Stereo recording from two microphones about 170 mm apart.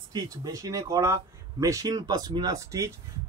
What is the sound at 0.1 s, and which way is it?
Speech, 20° right (ahead or behind).